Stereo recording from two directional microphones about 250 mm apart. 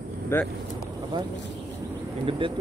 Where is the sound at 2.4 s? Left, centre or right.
Right.